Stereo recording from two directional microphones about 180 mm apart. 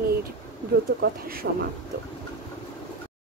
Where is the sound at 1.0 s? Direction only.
55° right (ahead or behind).